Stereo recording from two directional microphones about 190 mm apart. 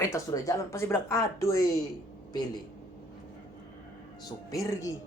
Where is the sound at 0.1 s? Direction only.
15° left (ahead or behind).